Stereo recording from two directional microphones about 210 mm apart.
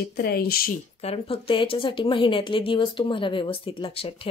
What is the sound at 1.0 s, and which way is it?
Speech, 30° left (ahead or behind).